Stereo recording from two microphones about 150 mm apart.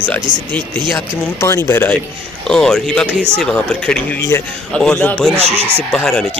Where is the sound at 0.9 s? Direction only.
20° left (ahead or behind).